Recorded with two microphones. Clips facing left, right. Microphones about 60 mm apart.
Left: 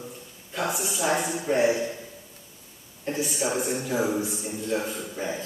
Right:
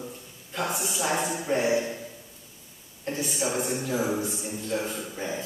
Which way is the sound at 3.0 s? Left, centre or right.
Centre.